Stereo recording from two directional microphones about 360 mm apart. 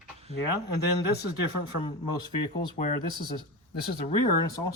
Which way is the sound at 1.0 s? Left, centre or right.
Left.